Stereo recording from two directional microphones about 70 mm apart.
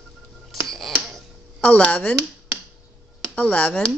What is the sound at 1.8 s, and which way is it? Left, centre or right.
Speech, centre.